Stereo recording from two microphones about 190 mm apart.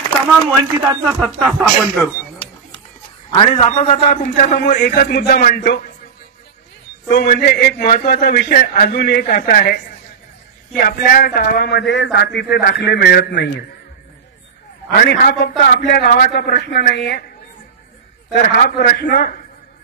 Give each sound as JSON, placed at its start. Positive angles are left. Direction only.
{"t": 1.0, "sound": "speech", "side_deg": 0}
{"t": 3.3, "sound": "a man's voice", "side_deg": 35}
{"t": 7.1, "sound": "a man's voice", "side_deg": 50}
{"t": 10.8, "sound": "speech", "side_deg": 50}
{"t": 15.0, "sound": "speech", "side_deg": 55}
{"t": 18.3, "sound": "a man's voice", "side_deg": 50}